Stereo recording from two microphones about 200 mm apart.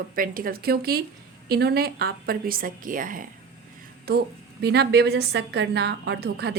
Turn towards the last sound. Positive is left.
turn(degrees=-55)  # may be behind; listen again after turning